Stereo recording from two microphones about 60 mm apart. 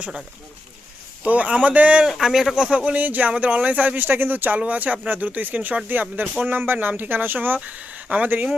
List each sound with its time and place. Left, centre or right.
1.2 s speech: right
2.0 s speech: centre; by 8.4 s right